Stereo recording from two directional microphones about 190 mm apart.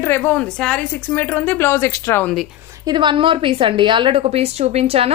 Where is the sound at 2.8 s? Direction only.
25° right (ahead or behind).